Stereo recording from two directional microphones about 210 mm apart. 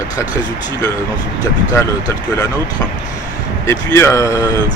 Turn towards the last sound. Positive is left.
turn(degrees=15)  # may be behind; listen again after turning